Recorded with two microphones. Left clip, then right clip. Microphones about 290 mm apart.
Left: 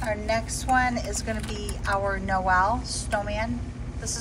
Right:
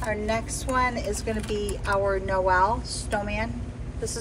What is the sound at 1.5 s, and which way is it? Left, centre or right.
A woman's voice, centre.